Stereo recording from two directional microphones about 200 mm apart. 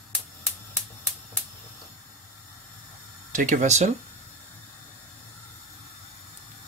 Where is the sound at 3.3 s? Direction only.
40° right (ahead or behind).